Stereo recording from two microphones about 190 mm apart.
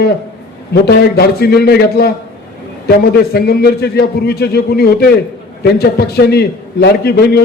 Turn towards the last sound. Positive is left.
turn(degrees=55)  # may be behind; listen again after turning